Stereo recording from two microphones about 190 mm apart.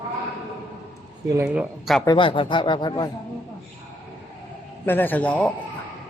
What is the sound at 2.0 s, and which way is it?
Speech, 25° left (ahead or behind).